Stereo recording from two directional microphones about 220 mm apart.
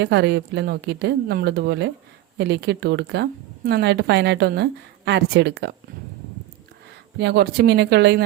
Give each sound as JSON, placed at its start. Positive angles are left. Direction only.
{"t": 0.0, "sound": "a woman's voice", "side_deg": -50}
{"t": 7.2, "sound": "a woman's voice", "side_deg": -50}